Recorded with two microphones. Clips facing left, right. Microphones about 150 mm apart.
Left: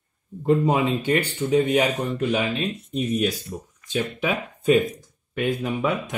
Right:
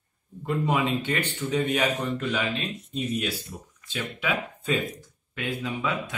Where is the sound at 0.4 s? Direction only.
35° left (ahead or behind).